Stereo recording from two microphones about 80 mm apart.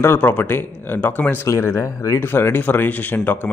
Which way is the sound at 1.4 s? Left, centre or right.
Left.